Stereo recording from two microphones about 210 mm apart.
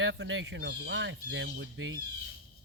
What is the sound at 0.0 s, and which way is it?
Speech, 60° right (ahead or behind).